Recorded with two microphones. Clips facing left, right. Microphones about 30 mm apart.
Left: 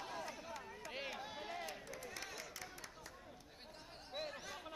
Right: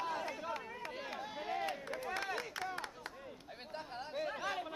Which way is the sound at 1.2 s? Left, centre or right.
Centre.